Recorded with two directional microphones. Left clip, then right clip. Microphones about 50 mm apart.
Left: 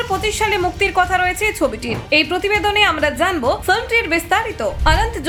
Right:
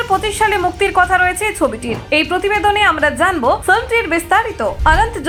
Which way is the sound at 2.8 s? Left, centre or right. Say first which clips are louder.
Right 2 dB; right.